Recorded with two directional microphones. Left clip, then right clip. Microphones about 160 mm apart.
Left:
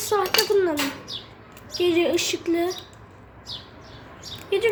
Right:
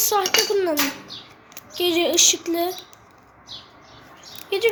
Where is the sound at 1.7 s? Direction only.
10° left (ahead or behind).